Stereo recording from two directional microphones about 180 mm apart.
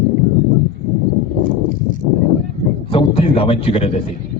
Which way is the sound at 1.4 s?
50° left (ahead or behind).